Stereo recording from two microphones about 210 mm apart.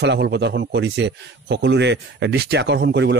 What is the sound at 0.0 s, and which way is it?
A man's voice, 55° right (ahead or behind).